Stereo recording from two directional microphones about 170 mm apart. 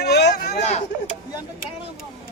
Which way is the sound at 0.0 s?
75° left (ahead or behind).